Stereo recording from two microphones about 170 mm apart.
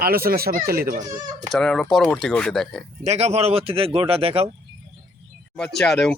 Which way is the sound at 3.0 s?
40° right (ahead or behind).